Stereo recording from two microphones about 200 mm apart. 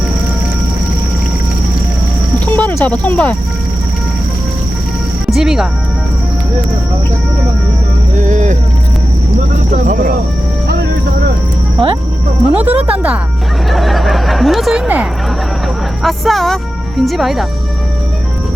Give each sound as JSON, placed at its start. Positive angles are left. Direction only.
{"t": 2.5, "sound": "speech", "side_deg": 10}
{"t": 5.3, "sound": "speech", "side_deg": 0}
{"t": 8.1, "sound": "vehicle", "side_deg": -40}
{"t": 9.7, "sound": "speech", "side_deg": -40}
{"t": 11.8, "sound": "speech", "side_deg": 0}
{"t": 16.0, "sound": "speech", "side_deg": 0}